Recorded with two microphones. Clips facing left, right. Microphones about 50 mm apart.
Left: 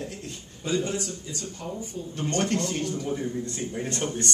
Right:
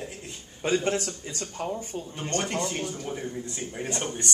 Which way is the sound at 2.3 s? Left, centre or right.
Centre.